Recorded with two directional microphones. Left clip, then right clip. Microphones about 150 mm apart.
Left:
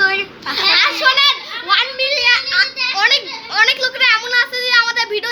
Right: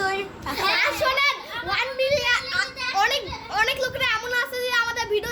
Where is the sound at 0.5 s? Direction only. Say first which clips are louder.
Left 8 dB; 15° right (ahead or behind).